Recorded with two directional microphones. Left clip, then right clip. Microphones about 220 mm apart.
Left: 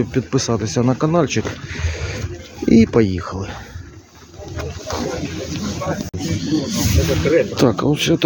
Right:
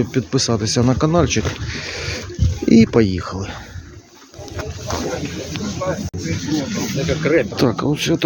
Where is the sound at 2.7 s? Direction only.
10° right (ahead or behind).